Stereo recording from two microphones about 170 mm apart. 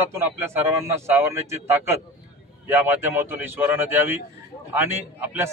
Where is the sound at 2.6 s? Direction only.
15° right (ahead or behind).